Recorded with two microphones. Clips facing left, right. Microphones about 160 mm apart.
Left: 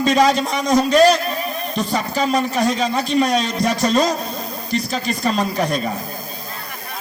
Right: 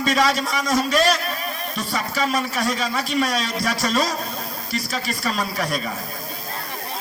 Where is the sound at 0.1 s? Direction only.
40° left (ahead or behind).